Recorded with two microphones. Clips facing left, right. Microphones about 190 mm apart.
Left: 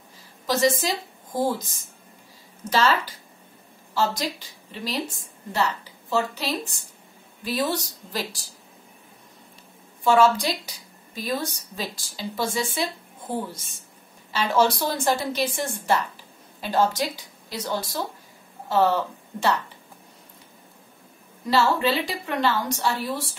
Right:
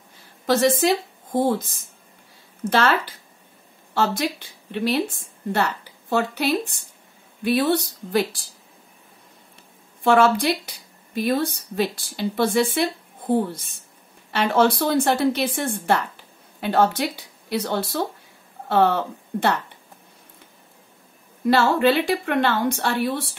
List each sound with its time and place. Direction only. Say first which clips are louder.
0.5 s a woman's voice: right 4 dB; 60° right (ahead or behind)
10.0 s speech: right 2 dB; 55° right (ahead or behind)
21.5 s speech: right 4 dB; 55° right (ahead or behind)